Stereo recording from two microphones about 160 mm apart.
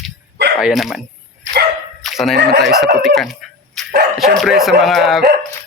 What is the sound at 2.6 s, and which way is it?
Speech, centre (ahead or behind).